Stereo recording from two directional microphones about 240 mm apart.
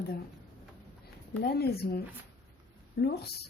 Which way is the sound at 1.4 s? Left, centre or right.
Left.